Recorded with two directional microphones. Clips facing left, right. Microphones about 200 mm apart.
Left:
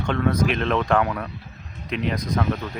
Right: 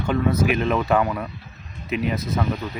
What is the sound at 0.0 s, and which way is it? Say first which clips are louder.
A man's voice: right 1 dB; 5° right (ahead or behind).